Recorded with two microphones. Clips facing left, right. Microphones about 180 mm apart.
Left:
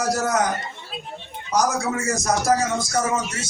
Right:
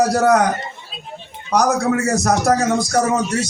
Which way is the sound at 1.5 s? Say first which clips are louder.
Right 5 dB; 65° right (ahead or behind).